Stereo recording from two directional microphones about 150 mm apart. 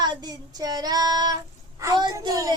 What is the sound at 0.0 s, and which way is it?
Child singing, 30° right (ahead or behind).